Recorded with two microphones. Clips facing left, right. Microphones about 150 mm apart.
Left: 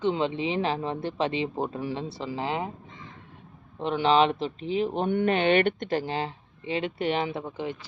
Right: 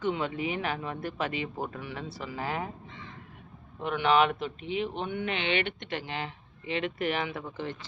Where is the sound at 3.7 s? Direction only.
30° left (ahead or behind).